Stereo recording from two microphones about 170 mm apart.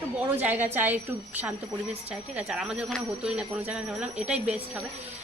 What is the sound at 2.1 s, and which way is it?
A woman's voice, 5° right (ahead or behind).